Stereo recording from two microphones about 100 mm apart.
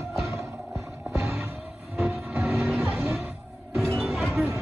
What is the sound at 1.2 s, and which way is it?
Music, 30° right (ahead or behind).